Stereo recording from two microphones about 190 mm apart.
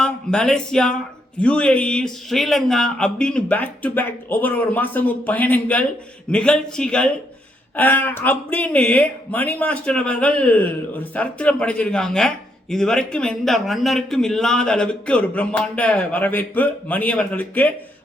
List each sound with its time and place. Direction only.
0.0 s a man's voice: 5° left (ahead or behind)